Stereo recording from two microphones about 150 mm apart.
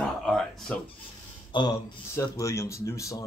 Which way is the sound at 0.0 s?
5° left (ahead or behind).